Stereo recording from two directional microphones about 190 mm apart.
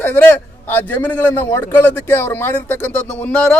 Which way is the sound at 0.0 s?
10° left (ahead or behind).